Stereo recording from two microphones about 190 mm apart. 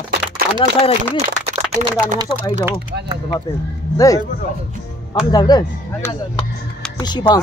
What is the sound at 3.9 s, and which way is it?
Speech, 20° left (ahead or behind).